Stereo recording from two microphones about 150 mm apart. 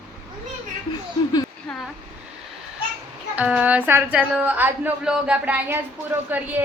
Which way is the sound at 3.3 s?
10° right (ahead or behind).